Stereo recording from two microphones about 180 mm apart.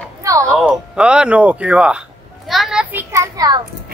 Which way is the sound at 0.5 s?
5° right (ahead or behind).